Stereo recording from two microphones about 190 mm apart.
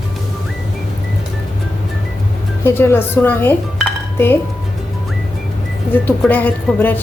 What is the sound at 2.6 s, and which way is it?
Speech, 10° left (ahead or behind).